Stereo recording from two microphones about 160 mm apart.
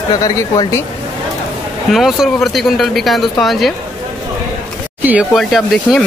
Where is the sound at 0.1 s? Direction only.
25° left (ahead or behind).